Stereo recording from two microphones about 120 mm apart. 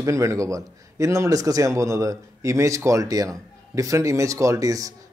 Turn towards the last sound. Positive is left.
turn(degrees=-30)  # may be behind; listen again after turning